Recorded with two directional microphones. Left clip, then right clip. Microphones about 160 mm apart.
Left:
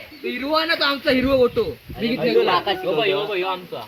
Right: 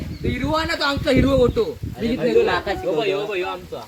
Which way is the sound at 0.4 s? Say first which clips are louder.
Left 2 dB; 5° left (ahead or behind).